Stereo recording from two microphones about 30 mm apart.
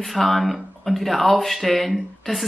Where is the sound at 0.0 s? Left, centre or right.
Centre.